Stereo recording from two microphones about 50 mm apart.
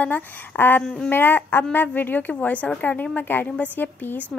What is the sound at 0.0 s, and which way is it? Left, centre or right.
Speech, left.